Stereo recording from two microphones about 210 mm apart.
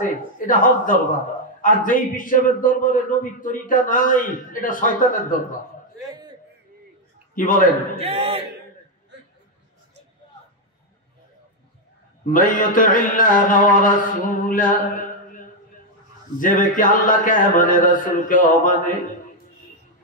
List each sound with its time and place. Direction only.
0.0 s a man's voice: 40° left (ahead or behind)
6.0 s a sound: 20° right (ahead or behind)
7.3 s a man's voice: 40° left (ahead or behind)
7.9 s a man's voice: 25° right (ahead or behind)
12.3 s a man's voice: 40° left (ahead or behind)